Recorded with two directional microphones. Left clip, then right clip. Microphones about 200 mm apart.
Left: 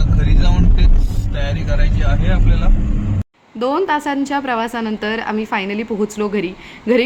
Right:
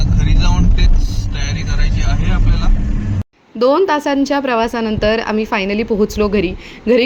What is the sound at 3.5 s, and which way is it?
A woman's voice, 15° right (ahead or behind).